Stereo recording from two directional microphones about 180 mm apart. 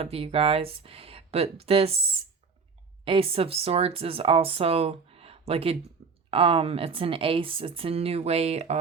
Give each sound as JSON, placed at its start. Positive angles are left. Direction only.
{"t": 0.0, "sound": "speech", "side_deg": -35}
{"t": 3.0, "sound": "speech", "side_deg": -30}